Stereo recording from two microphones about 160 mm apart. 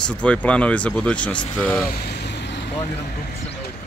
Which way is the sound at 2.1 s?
90° left.